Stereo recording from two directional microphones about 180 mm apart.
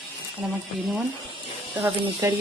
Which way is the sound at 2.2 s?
20° right (ahead or behind).